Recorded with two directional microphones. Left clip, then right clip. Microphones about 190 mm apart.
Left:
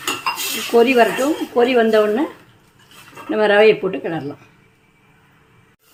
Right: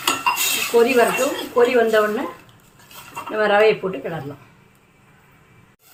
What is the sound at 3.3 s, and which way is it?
Speech, 55° left (ahead or behind).